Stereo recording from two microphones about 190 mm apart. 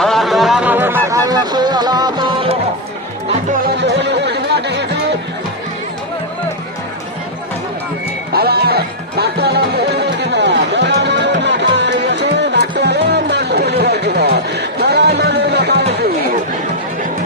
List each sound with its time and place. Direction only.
0.0 s a sound: centre (ahead or behind); by 2.6 s 25° right (ahead or behind)
3.8 s music: 65° right (ahead or behind)
8.3 s music: 55° right (ahead or behind)